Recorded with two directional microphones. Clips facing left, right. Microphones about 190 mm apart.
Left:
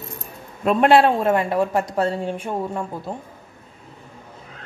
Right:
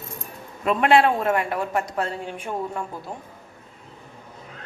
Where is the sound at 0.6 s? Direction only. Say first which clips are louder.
Left 3 dB; 35° left (ahead or behind).